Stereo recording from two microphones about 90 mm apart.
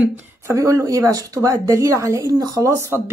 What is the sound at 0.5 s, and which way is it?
A woman's voice, 35° right (ahead or behind).